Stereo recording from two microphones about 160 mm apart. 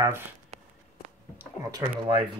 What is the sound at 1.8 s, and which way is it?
Speech, 35° right (ahead or behind).